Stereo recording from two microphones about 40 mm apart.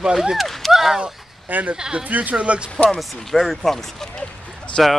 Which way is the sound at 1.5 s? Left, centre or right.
Right.